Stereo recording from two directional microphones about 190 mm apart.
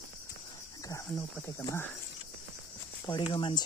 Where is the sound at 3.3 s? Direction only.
25° left (ahead or behind).